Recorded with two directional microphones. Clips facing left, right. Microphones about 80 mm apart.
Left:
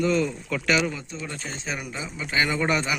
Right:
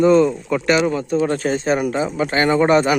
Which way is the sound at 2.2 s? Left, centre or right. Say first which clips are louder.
Right 8 dB; right.